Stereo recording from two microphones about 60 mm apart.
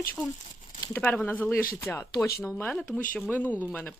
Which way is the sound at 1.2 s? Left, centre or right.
Left.